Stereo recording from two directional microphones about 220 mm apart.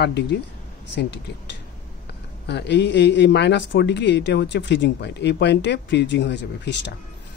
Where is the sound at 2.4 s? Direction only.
50° left (ahead or behind).